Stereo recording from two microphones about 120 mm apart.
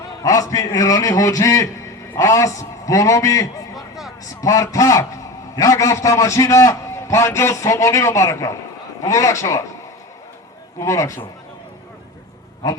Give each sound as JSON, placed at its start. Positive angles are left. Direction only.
{"t": 0.2, "sound": "a man's voice", "side_deg": 30}
{"t": 3.8, "sound": "a sound", "side_deg": 0}
{"t": 4.4, "sound": "a man's voice", "side_deg": 25}
{"t": 10.8, "sound": "a man's voice", "side_deg": 25}